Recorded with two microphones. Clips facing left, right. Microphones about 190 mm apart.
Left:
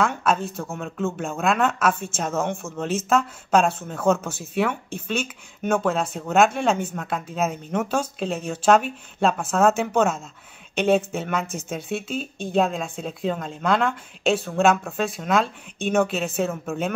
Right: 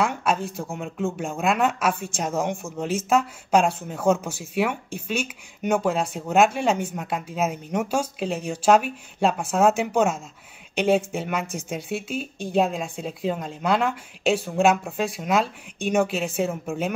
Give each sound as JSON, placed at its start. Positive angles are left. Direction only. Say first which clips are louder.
{"t": 0.0, "sound": "speech", "louder": "left 1 dB", "side_deg": -10}